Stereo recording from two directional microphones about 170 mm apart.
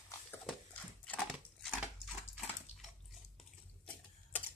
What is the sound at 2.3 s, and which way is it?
Bathtub, centre (ahead or behind).